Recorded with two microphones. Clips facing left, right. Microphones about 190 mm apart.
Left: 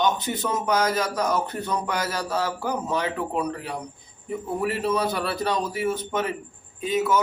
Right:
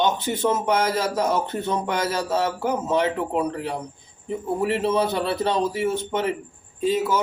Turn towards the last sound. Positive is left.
turn(degrees=-30)  # may be behind; listen again after turning